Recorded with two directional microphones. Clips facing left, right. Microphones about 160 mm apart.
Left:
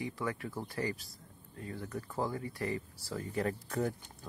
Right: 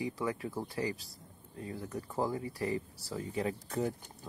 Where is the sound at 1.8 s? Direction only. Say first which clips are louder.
Right 2 dB; 20° right (ahead or behind).